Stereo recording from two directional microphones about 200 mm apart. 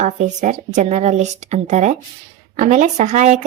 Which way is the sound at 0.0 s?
35° right (ahead or behind).